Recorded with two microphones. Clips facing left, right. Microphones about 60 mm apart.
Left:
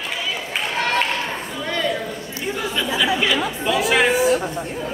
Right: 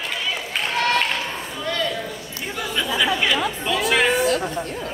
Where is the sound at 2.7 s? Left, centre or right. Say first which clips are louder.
Even; centre.